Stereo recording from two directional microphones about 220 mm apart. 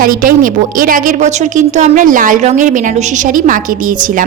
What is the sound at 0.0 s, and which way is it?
A woman's voice, 40° right (ahead or behind).